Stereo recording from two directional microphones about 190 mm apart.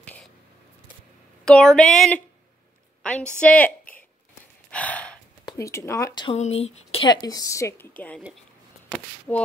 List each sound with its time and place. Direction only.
0.0 s a sound: 5° left (ahead or behind)
1.4 s a woman's voice: 5° left (ahead or behind)
4.6 s gasp: 5° left (ahead or behind)
5.4 s speech: 20° left (ahead or behind)
6.3 s a woman's voice: 35° left (ahead or behind); by 7.9 s 15° left (ahead or behind)
9.3 s a sound: 10° left (ahead or behind)